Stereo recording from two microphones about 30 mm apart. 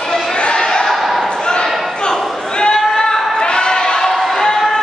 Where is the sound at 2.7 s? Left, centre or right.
Left.